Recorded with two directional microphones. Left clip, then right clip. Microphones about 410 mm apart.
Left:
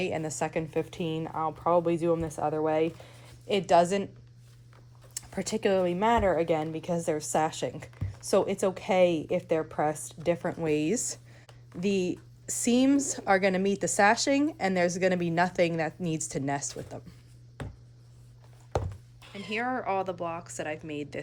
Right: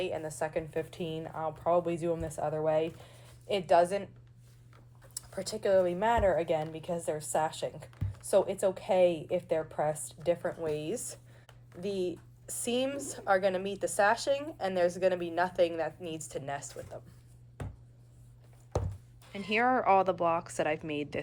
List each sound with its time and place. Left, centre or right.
0.0 s a woman's voice: centre
5.4 s speech: left
6.0 s speech: left
10.4 s speech: left
10.9 s a woman's voice: centre
12.5 s a woman's voice: centre
17.6 s a sound: centre
18.7 s a sound: centre
19.2 s speech: centre